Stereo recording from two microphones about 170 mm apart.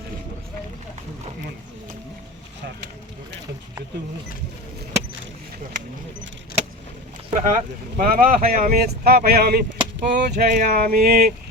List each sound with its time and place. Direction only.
7.3 s speech: 50° right (ahead or behind)